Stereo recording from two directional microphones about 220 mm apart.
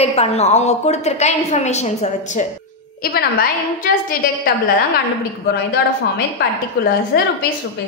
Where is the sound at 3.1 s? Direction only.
40° left (ahead or behind).